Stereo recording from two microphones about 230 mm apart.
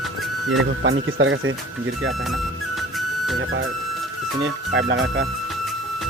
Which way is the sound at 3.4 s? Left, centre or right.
Right.